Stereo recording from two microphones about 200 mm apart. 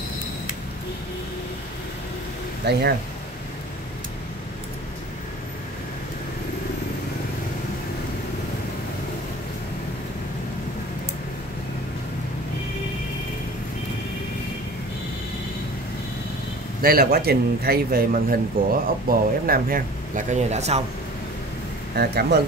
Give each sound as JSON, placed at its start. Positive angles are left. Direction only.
{"t": 2.6, "sound": "speech", "side_deg": -55}
{"t": 16.8, "sound": "speech", "side_deg": -50}
{"t": 21.9, "sound": "speech", "side_deg": -55}